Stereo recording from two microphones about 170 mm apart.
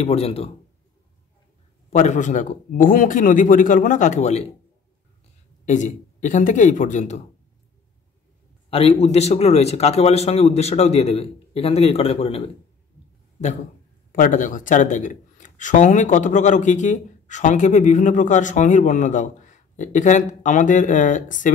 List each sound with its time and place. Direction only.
0.0 s a man's voice: 35° left (ahead or behind)
1.9 s speech: 40° left (ahead or behind)
5.7 s speech: 45° left (ahead or behind)
8.6 s a man's voice: 35° left (ahead or behind)
14.1 s speech: 50° left (ahead or behind)